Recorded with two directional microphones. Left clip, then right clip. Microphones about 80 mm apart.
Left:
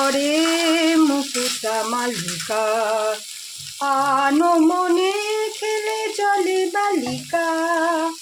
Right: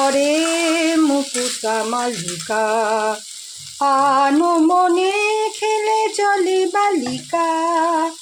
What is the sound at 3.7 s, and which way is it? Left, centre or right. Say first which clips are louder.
Frying: right 4 dB; right.